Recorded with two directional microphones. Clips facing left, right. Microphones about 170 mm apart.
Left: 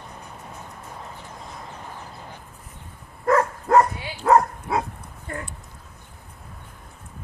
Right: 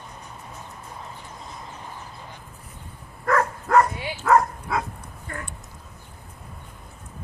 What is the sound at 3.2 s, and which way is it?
Dog, 25° left (ahead or behind).